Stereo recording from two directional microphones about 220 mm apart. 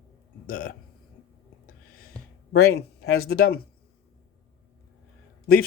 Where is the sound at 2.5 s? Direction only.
45° left (ahead or behind).